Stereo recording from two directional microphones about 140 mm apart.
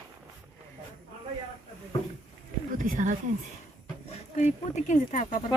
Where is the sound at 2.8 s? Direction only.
70° right (ahead or behind).